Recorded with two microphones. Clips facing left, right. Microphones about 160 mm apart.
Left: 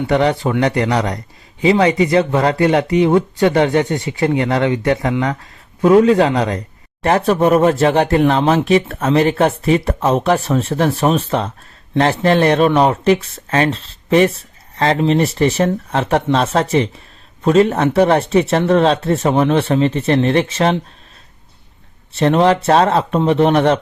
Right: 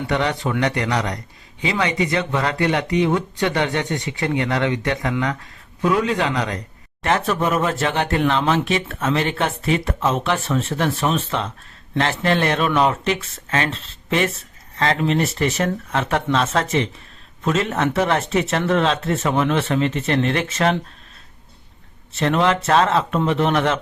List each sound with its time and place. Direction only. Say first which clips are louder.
0.1 s speech: left 6 dB; 35° left (ahead or behind)
22.2 s speech: left 6 dB; 35° left (ahead or behind)